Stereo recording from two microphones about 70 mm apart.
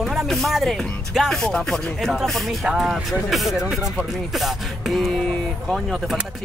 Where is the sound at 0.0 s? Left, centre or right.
Centre.